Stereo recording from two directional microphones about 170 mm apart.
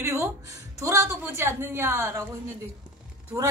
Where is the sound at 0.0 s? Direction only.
15° right (ahead or behind).